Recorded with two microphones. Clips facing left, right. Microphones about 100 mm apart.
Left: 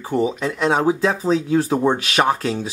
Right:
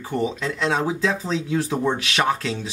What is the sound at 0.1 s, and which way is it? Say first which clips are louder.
Speech: left 4 dB; 10° left (ahead or behind).